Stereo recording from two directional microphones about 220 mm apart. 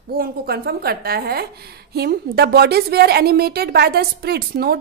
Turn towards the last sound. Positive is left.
turn(degrees=-45)  # may be behind; listen again after turning